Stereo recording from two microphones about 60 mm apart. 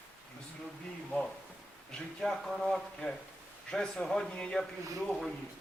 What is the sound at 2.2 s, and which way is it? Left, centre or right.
Speech, centre.